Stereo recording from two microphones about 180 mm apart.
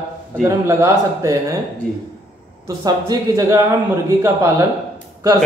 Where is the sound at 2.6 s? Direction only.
20° right (ahead or behind).